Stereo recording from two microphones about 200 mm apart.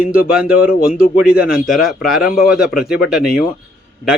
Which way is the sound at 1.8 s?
Centre (ahead or behind).